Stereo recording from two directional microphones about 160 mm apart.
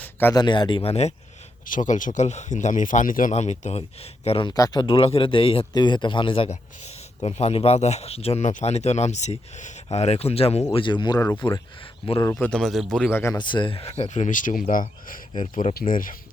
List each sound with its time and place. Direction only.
0.0 s a sound: 15° left (ahead or behind)
0.3 s speech: 25° left (ahead or behind)
1.6 s speech: 55° left (ahead or behind); by 12.5 s 20° left (ahead or behind)
12.5 s speech: 5° left (ahead or behind)
13.3 s speech: 30° left (ahead or behind); by 16.1 s 60° left (ahead or behind)